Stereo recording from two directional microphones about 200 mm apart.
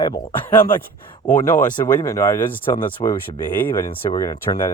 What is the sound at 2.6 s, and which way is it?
Speech, 25° left (ahead or behind).